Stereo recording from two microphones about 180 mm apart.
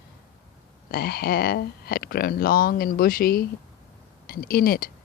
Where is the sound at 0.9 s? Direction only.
60° left (ahead or behind).